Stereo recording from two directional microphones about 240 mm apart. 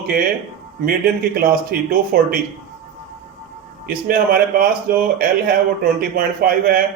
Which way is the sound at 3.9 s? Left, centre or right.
Right.